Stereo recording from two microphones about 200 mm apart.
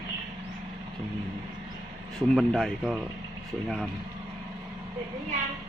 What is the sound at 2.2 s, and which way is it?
Speech, centre (ahead or behind).